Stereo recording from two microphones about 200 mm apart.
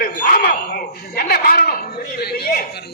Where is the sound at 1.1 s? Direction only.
50° left (ahead or behind).